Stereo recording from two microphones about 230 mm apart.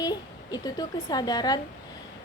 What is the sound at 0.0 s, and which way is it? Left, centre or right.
A woman's voice, centre.